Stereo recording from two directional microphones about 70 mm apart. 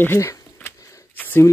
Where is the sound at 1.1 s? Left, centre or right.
Left.